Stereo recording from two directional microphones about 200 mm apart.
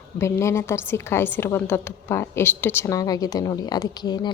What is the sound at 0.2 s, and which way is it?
A woman's voice, 15° left (ahead or behind).